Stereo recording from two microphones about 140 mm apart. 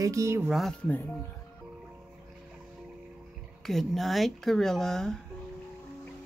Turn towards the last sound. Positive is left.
turn(degrees=5)  # may be behind; listen again after turning